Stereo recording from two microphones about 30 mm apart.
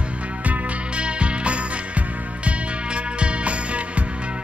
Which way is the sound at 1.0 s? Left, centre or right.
Right.